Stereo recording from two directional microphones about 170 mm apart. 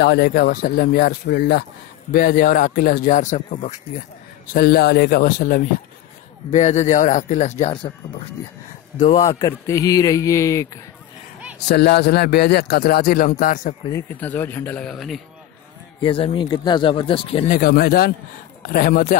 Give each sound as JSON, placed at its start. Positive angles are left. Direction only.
{"t": 0.0, "sound": "speech", "side_deg": 70}
{"t": 4.6, "sound": "speech", "side_deg": 65}
{"t": 6.5, "sound": "speech", "side_deg": 40}
{"t": 9.0, "sound": "speech", "side_deg": 40}
{"t": 9.4, "sound": "a man's voice", "side_deg": 20}
{"t": 11.7, "sound": "speech", "side_deg": 75}
{"t": 13.9, "sound": "speech", "side_deg": 10}
{"t": 16.0, "sound": "speech", "side_deg": 30}
{"t": 17.5, "sound": "speech", "side_deg": 60}